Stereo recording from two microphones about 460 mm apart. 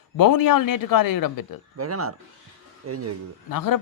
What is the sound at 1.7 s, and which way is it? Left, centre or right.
Speech, right.